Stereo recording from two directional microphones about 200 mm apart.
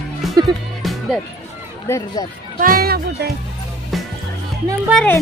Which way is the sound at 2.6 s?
45° right (ahead or behind).